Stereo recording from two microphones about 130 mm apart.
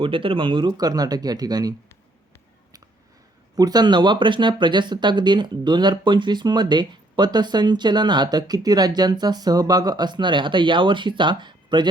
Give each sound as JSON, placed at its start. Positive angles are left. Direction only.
{"t": 0.0, "sound": "speech", "side_deg": -45}
{"t": 3.5, "sound": "speech", "side_deg": -30}